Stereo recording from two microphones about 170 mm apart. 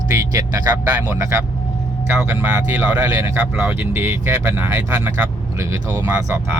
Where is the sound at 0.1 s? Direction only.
20° right (ahead or behind).